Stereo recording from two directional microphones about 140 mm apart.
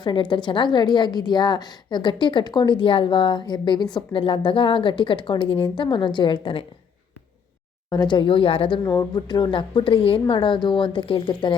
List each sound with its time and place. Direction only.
0.0 s a woman's voice: 35° left (ahead or behind)
7.9 s a woman's voice: 30° left (ahead or behind)
8.8 s a woman's voice: 25° left (ahead or behind)